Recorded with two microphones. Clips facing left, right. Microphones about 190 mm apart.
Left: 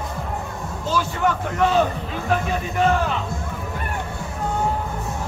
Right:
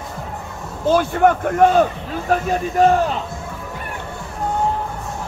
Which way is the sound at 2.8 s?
40° right (ahead or behind).